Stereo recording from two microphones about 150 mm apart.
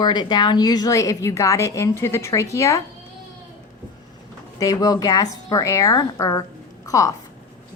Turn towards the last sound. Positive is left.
turn(degrees=20)  # may be behind; listen again after turning